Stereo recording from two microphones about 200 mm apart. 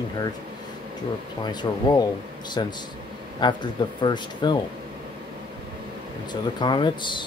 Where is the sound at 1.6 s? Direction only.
20° left (ahead or behind).